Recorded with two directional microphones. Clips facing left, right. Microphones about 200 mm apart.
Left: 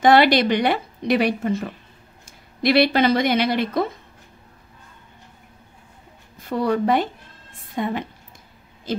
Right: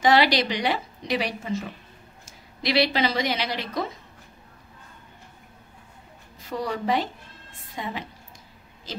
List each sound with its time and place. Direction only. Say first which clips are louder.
0.0 s a woman's voice: left 5 dB; 55° left (ahead or behind)
6.5 s a woman's voice: left 6 dB; 55° left (ahead or behind)